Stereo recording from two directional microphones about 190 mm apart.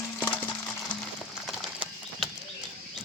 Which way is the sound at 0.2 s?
10° left (ahead or behind).